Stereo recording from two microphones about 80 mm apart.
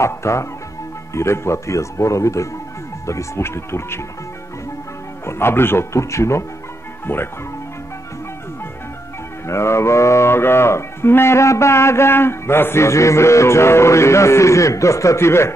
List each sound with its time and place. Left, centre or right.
0.0 s speech: left
5.2 s speech: left
9.5 s speech: left